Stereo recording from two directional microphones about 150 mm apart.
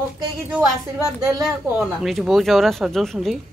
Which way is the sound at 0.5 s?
10° right (ahead or behind).